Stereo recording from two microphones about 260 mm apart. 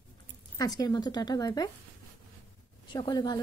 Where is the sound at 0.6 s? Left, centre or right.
Centre.